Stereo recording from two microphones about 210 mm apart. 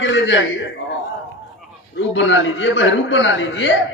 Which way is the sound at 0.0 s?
60° left (ahead or behind).